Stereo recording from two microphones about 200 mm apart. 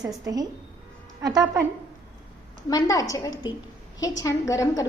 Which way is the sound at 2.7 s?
15° left (ahead or behind).